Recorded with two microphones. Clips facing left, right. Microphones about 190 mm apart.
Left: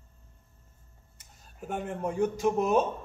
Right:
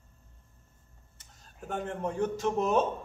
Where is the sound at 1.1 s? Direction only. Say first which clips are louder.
Left 3 dB; 10° left (ahead or behind).